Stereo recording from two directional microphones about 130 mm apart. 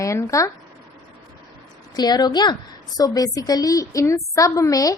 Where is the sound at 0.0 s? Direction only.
25° left (ahead or behind).